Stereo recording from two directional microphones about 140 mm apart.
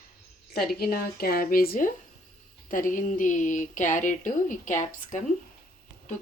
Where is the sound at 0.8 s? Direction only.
90° left.